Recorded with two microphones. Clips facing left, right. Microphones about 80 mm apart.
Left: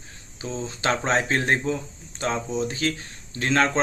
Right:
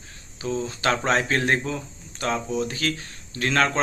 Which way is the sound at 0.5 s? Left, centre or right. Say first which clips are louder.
Right 1 dB; left.